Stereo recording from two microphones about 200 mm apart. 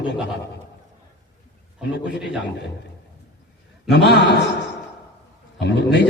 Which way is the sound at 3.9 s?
55° left (ahead or behind).